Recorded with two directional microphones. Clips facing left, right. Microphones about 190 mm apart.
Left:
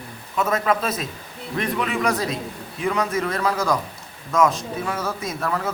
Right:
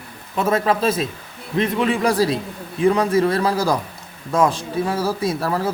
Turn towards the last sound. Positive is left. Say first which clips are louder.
# right 5 dB
turn(degrees=-35)  # may be behind; listen again after turning